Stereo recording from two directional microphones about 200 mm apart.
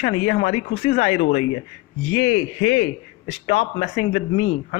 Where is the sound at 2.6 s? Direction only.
35° left (ahead or behind).